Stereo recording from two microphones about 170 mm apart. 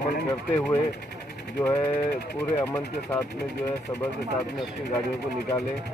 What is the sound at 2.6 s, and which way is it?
Speech, 10° left (ahead or behind).